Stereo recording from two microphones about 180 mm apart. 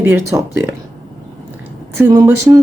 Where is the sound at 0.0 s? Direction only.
15° right (ahead or behind).